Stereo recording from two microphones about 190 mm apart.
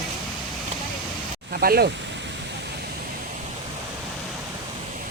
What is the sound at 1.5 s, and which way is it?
Speech, 50° right (ahead or behind).